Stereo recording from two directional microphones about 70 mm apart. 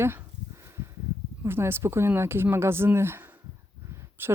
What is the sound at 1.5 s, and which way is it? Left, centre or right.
Speech, right.